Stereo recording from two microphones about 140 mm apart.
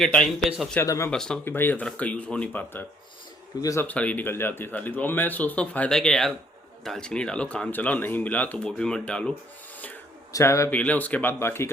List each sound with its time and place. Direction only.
0.0 s a man's voice: 5° left (ahead or behind)
0.9 s a man's voice: 20° left (ahead or behind)
1.1 s a man's voice: 5° left (ahead or behind)
1.5 s speech: 15° left (ahead or behind)
3.6 s a man's voice: 25° left (ahead or behind)
3.8 s speech: 10° left (ahead or behind)
10.3 s a man's voice: 20° left (ahead or behind)